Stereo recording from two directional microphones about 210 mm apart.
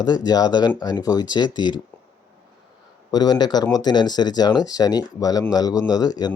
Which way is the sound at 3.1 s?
20° left (ahead or behind).